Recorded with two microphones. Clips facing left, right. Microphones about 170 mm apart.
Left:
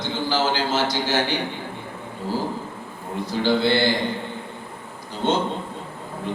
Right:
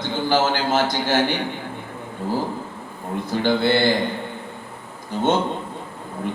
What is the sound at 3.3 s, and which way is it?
Speech, 55° right (ahead or behind).